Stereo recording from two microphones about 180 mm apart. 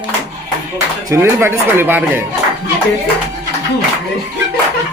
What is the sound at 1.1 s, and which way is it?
A man's voice, 15° right (ahead or behind).